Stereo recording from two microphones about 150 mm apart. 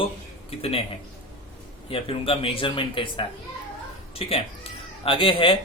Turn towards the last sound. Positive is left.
turn(degrees=35)  # may be behind; listen again after turning